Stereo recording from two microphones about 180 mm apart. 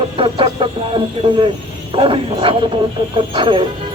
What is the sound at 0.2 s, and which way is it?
A man's voice, 30° right (ahead or behind).